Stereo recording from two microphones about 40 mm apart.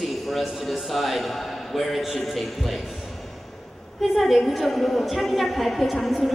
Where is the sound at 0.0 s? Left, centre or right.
Centre.